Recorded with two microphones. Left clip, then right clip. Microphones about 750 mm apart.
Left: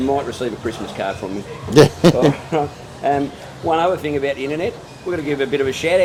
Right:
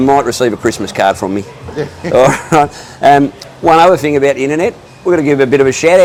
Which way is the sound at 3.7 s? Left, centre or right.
Right.